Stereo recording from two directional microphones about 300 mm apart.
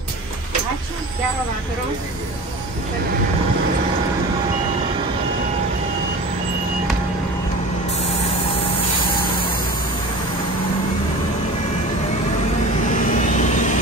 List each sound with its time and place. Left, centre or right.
12.9 s vehicle: left